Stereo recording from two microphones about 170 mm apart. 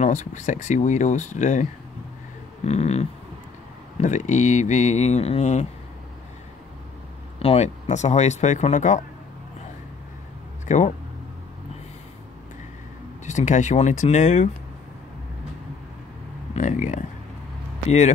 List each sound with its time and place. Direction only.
0.0 s speech: 45° left (ahead or behind)
2.6 s a sound: 40° left (ahead or behind)
4.0 s speech: 45° left (ahead or behind)
7.3 s speech: 35° left (ahead or behind)
10.7 s speech: 45° left (ahead or behind)
13.2 s speech: 45° left (ahead or behind)
16.5 s speech: 50° left (ahead or behind)